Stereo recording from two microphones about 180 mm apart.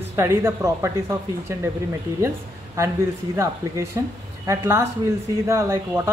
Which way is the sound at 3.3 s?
15° right (ahead or behind).